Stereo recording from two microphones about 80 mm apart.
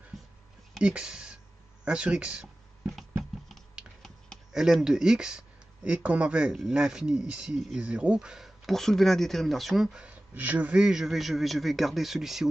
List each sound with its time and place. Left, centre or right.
0.1 s a sound: centre
0.7 s speech: centre
4.5 s speech: centre
8.6 s speech: centre
10.3 s speech: right; by 12.4 s centre